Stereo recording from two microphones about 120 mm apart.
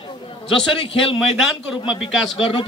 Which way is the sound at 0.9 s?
50° left (ahead or behind).